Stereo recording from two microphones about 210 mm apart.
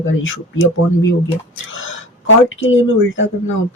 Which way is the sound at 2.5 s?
70° left (ahead or behind).